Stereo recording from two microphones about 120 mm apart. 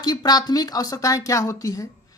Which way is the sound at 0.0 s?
35° left (ahead or behind).